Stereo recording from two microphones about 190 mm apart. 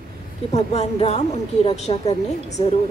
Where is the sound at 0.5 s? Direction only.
35° left (ahead or behind).